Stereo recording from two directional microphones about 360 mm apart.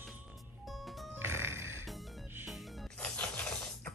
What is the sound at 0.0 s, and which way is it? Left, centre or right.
Music, centre.